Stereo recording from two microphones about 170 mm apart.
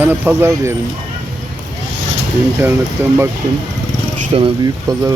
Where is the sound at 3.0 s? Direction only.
15° right (ahead or behind).